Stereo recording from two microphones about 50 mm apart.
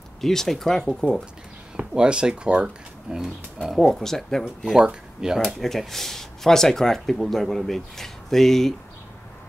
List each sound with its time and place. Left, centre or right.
0.2 s speech: centre
1.8 s speech: centre
3.7 s speech: centre
4.6 s speech: centre
5.6 s speech: centre